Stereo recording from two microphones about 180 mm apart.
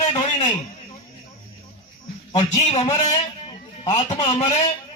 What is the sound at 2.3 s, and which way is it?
Speech, 30° left (ahead or behind).